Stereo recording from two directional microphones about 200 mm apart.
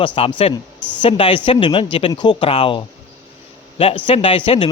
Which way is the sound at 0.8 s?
5° left (ahead or behind).